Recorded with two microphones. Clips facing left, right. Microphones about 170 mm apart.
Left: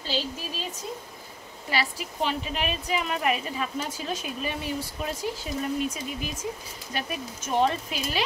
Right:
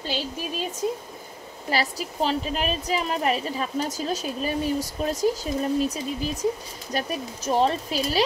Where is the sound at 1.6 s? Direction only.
40° right (ahead or behind).